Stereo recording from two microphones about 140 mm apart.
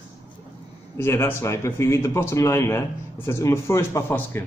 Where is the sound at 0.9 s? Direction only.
20° left (ahead or behind).